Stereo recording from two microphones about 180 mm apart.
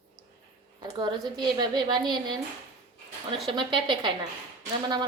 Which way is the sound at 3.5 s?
25° right (ahead or behind).